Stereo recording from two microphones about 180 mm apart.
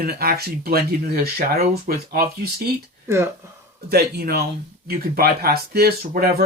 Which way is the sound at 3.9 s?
60° right (ahead or behind).